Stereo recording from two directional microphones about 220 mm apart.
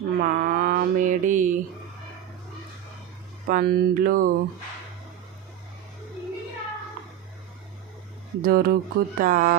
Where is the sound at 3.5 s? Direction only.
40° right (ahead or behind).